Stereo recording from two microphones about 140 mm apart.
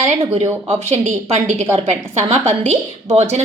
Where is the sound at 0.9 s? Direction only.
55° right (ahead or behind).